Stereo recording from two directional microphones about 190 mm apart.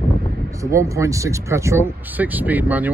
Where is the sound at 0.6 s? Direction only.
15° right (ahead or behind).